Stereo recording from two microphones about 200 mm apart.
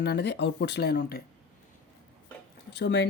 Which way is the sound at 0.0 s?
55° left (ahead or behind).